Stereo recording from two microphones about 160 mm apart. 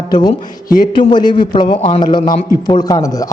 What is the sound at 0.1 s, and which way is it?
A man's voice, 25° left (ahead or behind).